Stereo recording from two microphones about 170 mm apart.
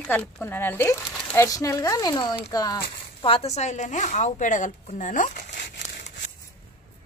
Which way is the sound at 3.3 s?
40° left (ahead or behind).